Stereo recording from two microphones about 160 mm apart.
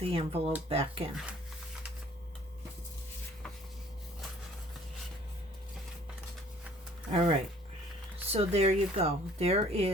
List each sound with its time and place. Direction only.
0.0 s speech: 35° right (ahead or behind)
7.1 s speech: 35° right (ahead or behind)